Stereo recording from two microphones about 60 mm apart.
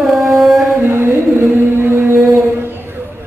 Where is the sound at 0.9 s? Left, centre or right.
Right.